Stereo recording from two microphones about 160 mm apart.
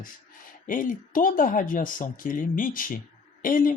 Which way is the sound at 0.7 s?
55° left (ahead or behind).